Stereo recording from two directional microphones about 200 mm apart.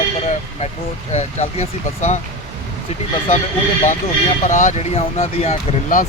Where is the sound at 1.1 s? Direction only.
35° left (ahead or behind).